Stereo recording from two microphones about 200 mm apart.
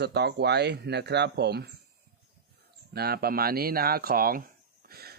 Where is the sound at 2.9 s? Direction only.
50° right (ahead or behind).